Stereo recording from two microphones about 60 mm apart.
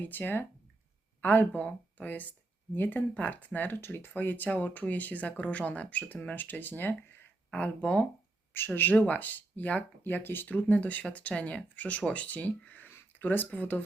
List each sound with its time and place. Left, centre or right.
0.0 s speech: left
7.5 s speech: left
8.5 s speech: left